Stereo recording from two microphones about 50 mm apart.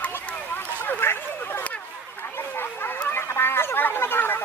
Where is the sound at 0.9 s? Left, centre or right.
Left.